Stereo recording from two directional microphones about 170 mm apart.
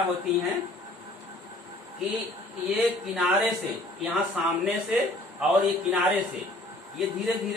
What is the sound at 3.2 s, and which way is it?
A man's voice, centre (ahead or behind).